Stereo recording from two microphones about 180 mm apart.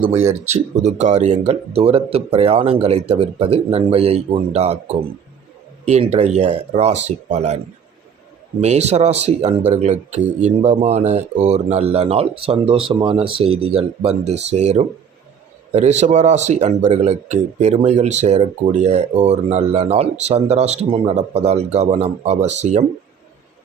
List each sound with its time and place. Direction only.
0.5 s speech: 40° right (ahead or behind)
8.6 s speech: 35° right (ahead or behind)